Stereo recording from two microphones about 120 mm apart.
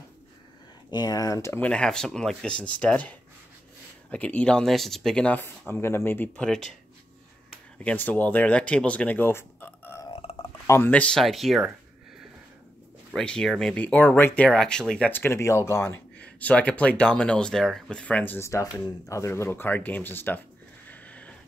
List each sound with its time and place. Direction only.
0.8 s speech: 35° left (ahead or behind)
1.6 s speech: 5° left (ahead or behind)
7.8 s speech: 15° left (ahead or behind)
10.3 s a sound: 60° left (ahead or behind)
10.7 s speech: 15° left (ahead or behind); by 11.7 s centre (ahead or behind)
13.1 s speech: 5° left (ahead or behind); by 16.0 s 20° left (ahead or behind)
16.2 s speech: 10° left (ahead or behind)
20.9 s a sound: 10° left (ahead or behind)